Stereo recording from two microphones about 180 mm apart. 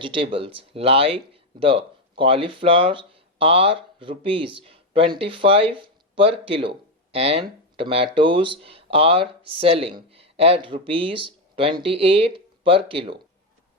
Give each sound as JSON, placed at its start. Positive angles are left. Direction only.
{"t": 0.0, "sound": "speech", "side_deg": -30}